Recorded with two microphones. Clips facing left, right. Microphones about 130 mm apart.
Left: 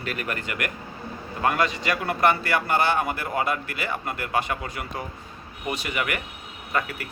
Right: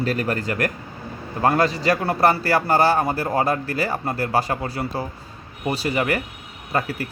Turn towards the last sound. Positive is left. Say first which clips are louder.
# right 4 dB
turn(degrees=-35)  # may be behind; listen again after turning